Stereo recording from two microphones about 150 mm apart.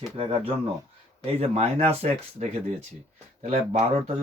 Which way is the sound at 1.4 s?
45° right (ahead or behind).